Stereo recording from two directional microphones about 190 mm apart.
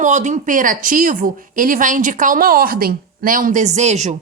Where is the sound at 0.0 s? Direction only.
40° right (ahead or behind).